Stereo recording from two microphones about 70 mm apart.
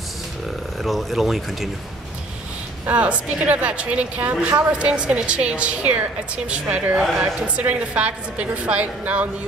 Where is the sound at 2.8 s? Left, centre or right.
Centre.